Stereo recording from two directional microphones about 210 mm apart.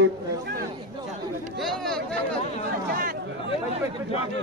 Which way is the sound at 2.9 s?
45° right (ahead or behind).